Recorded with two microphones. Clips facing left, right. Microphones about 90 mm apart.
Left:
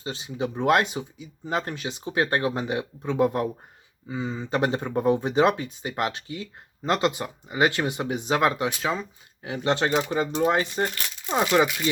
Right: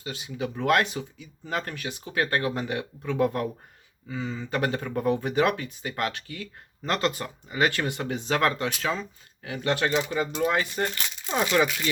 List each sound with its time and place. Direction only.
0.0 s speech: 30° left (ahead or behind)